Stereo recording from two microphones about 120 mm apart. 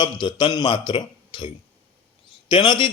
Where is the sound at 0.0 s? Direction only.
40° left (ahead or behind).